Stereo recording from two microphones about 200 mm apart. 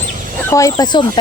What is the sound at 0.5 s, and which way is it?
Speech, 15° left (ahead or behind).